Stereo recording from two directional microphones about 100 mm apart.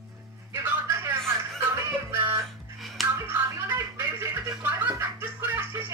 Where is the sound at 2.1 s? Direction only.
25° right (ahead or behind).